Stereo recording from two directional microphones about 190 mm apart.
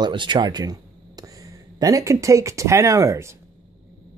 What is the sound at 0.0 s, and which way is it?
Speech, 25° right (ahead or behind).